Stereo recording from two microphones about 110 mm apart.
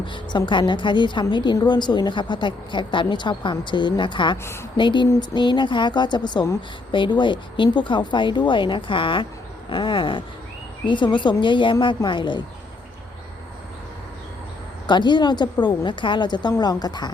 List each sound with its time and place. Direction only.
0.0 s a woman's voice: 45° left (ahead or behind)
14.8 s a woman's voice: 45° left (ahead or behind)